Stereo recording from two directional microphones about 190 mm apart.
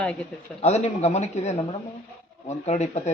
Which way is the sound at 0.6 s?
35° left (ahead or behind).